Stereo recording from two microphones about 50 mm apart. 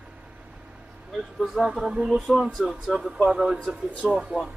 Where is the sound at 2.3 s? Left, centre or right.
Centre; by 4.5 s right.